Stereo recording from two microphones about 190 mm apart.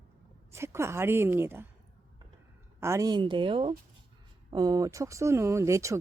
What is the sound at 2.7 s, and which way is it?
Speech, 15° right (ahead or behind).